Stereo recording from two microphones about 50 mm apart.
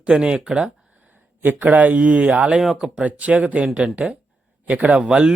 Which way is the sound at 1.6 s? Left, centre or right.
Right.